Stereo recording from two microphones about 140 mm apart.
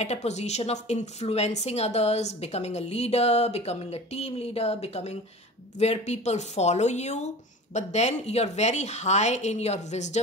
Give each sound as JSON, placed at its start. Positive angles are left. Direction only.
{"t": 0.0, "sound": "a woman's voice", "side_deg": 50}